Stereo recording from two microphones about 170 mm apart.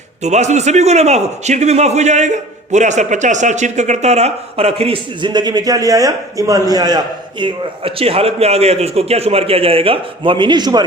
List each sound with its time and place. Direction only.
0.2 s a man's voice: 40° right (ahead or behind); by 10.8 s 25° right (ahead or behind)